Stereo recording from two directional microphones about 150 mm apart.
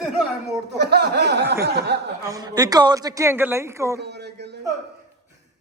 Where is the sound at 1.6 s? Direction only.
90° right.